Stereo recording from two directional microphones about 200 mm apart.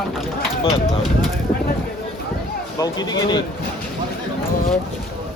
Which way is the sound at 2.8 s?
20° left (ahead or behind).